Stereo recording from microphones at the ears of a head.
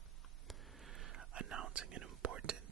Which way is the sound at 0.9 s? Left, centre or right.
Right.